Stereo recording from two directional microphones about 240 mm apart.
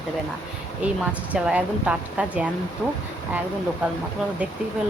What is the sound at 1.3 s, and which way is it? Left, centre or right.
Speech, centre.